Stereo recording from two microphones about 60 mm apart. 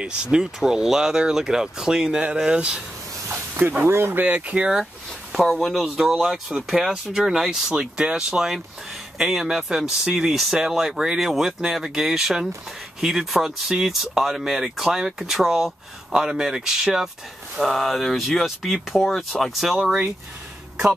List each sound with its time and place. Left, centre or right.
0.0 s speech: centre
3.3 s a sound: right
3.9 s speech: right
4.2 s speech: right
5.4 s speech: centre
5.7 s speech: centre
17.6 s speech: centre
19.0 s speech: centre
19.6 s speech: centre